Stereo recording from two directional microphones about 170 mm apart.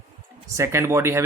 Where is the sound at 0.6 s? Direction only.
15° right (ahead or behind).